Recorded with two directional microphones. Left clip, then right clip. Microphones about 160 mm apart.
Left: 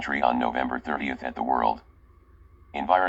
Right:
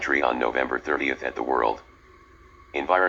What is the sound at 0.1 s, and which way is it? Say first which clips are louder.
Speech: even; 90° left.